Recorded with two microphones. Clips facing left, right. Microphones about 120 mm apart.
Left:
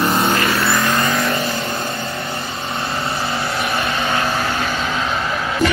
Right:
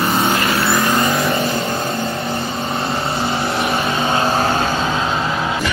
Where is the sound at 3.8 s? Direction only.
25° right (ahead or behind).